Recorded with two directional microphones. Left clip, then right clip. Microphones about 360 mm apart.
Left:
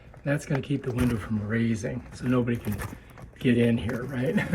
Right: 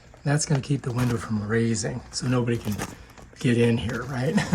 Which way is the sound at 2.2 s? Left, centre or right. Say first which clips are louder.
Right 1 dB; centre.